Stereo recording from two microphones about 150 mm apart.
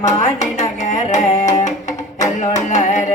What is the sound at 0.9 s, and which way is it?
Music, 50° left (ahead or behind).